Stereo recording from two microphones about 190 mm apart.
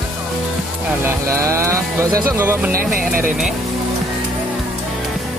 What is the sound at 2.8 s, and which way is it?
Speech, 50° right (ahead or behind).